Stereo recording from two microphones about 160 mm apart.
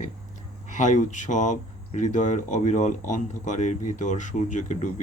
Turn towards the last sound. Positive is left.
turn(degrees=50)  # may be behind; listen again after turning